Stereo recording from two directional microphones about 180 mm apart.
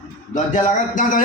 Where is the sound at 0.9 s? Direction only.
50° left (ahead or behind).